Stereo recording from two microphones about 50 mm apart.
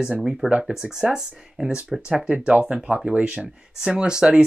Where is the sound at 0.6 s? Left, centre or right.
Centre.